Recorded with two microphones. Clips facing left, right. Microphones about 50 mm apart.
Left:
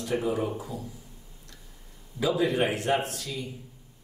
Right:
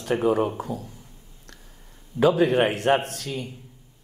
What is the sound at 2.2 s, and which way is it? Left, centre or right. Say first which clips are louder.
Speech: right 6 dB; right.